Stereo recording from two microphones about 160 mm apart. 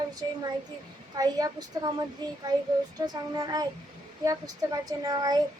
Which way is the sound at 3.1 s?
25° right (ahead or behind).